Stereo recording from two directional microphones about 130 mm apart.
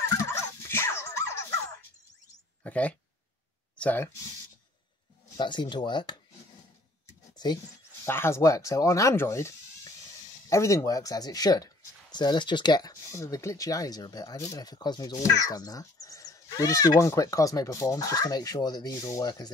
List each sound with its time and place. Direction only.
0.2 s dog: 20° left (ahead or behind)
2.6 s speech: 10° left (ahead or behind)
5.4 s speech: 35° left (ahead or behind)
7.3 s speech: 30° left (ahead or behind)